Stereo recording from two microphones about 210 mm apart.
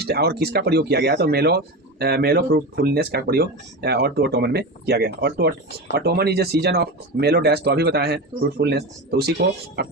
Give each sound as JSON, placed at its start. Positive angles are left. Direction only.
{"t": 0.0, "sound": "speech", "side_deg": -50}